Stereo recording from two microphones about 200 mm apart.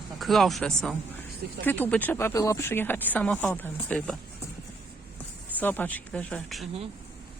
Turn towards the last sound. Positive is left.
turn(degrees=5)  # may be behind; listen again after turning